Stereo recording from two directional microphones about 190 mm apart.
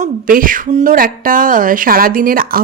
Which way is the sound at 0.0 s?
45° right (ahead or behind).